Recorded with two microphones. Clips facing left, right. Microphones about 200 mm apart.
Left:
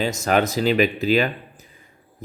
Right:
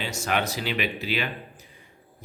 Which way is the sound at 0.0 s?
40° left (ahead or behind).